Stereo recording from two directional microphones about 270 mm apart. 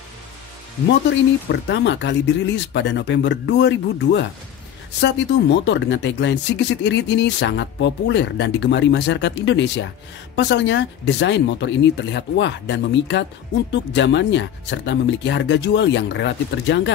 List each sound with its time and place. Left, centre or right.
1.5 s speech: left